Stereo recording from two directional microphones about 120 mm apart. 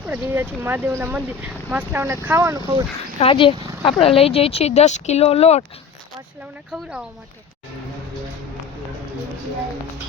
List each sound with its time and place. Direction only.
0.1 s speech: 15° right (ahead or behind)
3.2 s speech: 50° left (ahead or behind)